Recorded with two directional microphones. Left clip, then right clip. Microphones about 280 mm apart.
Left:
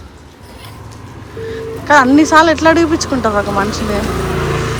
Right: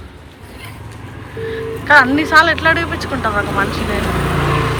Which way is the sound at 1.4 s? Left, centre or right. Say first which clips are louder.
Even; centre.